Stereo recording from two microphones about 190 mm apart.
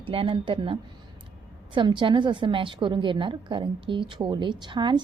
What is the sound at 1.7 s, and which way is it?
A woman's voice, 25° right (ahead or behind).